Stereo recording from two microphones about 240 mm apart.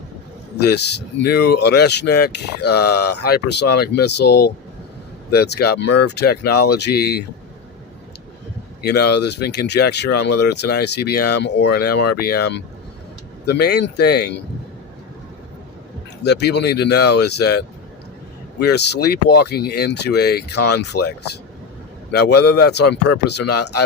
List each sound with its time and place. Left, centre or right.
0.5 s speech: left
8.8 s speech: left
16.2 s speech: left
18.6 s speech: left
22.1 s speech: left